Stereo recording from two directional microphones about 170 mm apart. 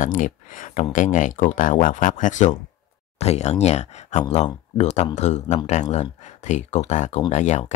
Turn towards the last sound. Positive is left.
turn(degrees=45)  # may be behind; listen again after turning